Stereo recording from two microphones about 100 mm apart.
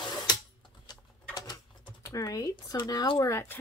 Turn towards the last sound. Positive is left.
turn(degrees=35)  # may be behind; listen again after turning